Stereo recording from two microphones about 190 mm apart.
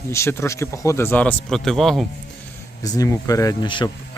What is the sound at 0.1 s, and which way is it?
Speech, 15° left (ahead or behind).